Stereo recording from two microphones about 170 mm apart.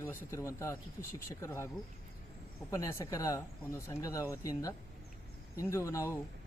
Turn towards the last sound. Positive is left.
turn(degrees=15)  # may be behind; listen again after turning